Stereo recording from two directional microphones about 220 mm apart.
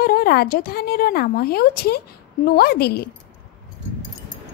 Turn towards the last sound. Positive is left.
turn(degrees=45)  # may be behind; listen again after turning